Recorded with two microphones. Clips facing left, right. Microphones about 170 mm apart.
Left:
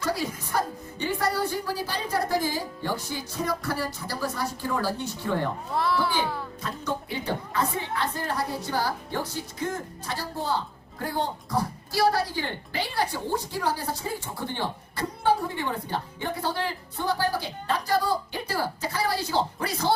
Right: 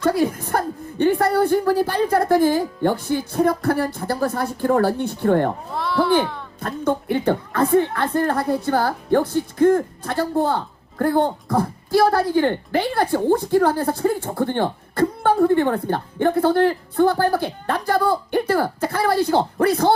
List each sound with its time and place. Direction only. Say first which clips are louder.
0.0 s a woman's voice: right 10 dB; 55° right (ahead or behind)
5.7 s a child's voice: even; centre (ahead or behind)
6.6 s a woman's voice: right 14 dB; 55° right (ahead or behind)